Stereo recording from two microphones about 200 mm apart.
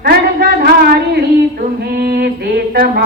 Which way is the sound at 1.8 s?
50° right (ahead or behind).